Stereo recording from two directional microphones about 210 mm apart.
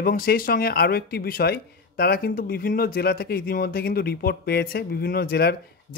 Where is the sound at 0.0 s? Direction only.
45° left (ahead or behind).